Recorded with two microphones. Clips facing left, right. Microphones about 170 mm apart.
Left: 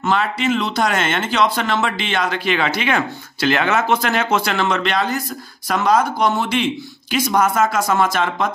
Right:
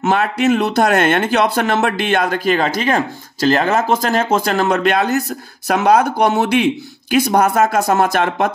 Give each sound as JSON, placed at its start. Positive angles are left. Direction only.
{"t": 0.1, "sound": "a man's voice", "side_deg": -50}
{"t": 5.7, "sound": "speech", "side_deg": -60}